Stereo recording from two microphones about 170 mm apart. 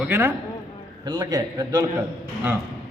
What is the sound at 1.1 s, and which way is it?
Speech, 25° right (ahead or behind).